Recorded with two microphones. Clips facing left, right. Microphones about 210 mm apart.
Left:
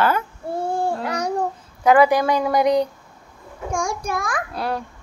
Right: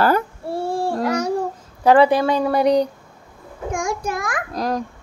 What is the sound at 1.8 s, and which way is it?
A woman's voice, 30° right (ahead or behind).